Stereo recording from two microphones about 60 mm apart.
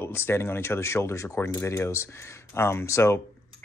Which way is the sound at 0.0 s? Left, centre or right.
Left.